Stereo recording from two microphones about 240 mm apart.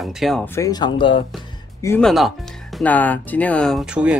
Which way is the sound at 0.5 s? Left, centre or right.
Centre.